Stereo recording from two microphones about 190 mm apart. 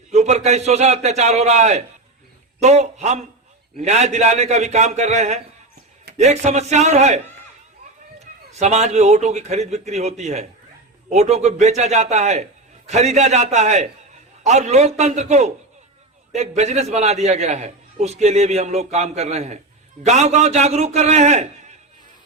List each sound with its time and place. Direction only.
0.1 s a man's voice: 35° right (ahead or behind)
8.5 s a man's voice: 35° right (ahead or behind)